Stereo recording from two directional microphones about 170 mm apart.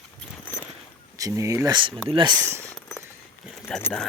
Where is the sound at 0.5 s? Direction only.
15° left (ahead or behind).